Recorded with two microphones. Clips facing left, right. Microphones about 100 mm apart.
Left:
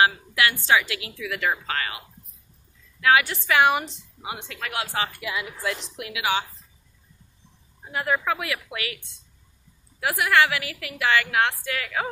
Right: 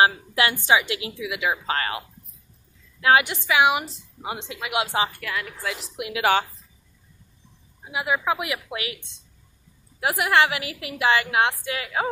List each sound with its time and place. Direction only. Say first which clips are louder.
0.0 s a woman's voice: right 1 dB; 25° right (ahead or behind)
1.3 s speech: even; 10° right (ahead or behind)
1.7 s a woman's voice: right 3 dB; 35° right (ahead or behind)
3.3 s speech: even; 10° right (ahead or behind)
5.2 s speech: even; 15° left (ahead or behind)
5.6 s a woman's voice: left 2 dB; 5° right (ahead or behind)
7.9 s a woman's voice: right 1 dB; 10° right (ahead or behind)